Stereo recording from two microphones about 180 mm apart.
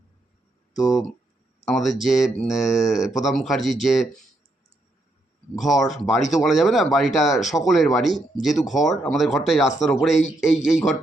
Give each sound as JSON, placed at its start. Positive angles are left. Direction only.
{"t": 0.8, "sound": "speech", "side_deg": 0}
{"t": 5.5, "sound": "speech", "side_deg": 0}